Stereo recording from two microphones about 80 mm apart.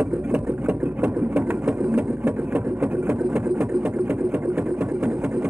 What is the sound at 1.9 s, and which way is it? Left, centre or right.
Vehicle, right.